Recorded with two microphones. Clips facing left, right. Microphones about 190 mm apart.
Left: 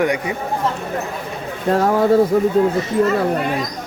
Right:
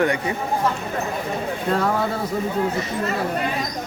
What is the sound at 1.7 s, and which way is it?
Speech, 40° left (ahead or behind).